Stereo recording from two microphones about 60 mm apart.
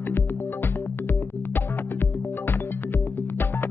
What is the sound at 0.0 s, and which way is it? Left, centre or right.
Music, left.